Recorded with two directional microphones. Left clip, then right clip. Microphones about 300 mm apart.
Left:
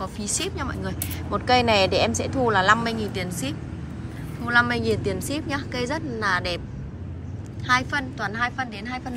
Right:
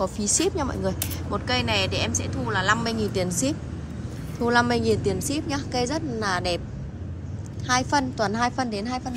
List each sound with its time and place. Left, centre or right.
0.0 s speech: centre
7.6 s speech: centre